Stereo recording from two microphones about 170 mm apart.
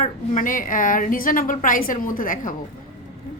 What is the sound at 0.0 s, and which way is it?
A woman's voice, 50° left (ahead or behind).